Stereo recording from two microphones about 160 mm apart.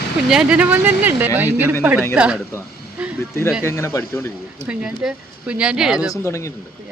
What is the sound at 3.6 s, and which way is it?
Speech, 15° left (ahead or behind).